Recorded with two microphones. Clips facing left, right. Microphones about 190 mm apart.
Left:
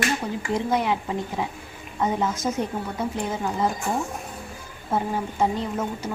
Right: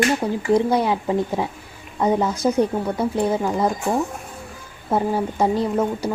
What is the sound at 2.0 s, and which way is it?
Speech, 35° right (ahead or behind).